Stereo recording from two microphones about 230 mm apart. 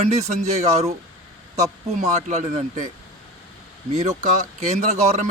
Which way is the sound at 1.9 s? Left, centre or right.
Right.